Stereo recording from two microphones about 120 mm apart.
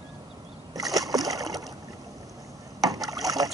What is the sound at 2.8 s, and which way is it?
Rowboat, 30° right (ahead or behind).